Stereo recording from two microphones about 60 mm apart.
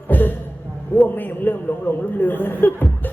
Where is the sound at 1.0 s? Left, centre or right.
Left.